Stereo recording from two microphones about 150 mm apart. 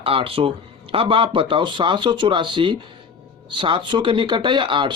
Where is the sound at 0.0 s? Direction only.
35° right (ahead or behind).